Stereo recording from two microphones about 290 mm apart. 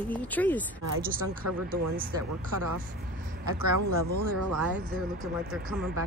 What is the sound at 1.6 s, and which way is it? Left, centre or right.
Speech, right.